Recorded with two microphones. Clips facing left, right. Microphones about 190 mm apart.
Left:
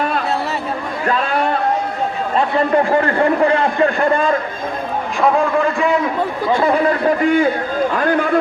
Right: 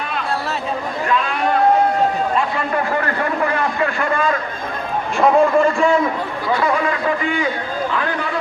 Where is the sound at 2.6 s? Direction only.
30° left (ahead or behind).